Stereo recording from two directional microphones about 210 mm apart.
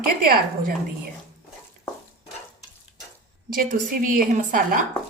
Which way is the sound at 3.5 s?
40° right (ahead or behind).